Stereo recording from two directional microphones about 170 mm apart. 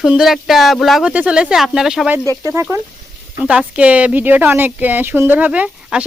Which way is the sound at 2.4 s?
15° right (ahead or behind).